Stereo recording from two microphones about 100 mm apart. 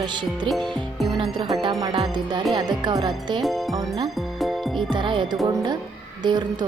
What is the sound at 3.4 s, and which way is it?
Speech, centre (ahead or behind).